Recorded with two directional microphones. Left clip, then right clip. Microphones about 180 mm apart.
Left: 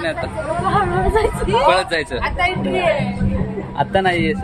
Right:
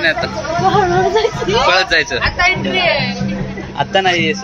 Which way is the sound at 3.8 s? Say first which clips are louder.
Right 3 dB; 20° left (ahead or behind).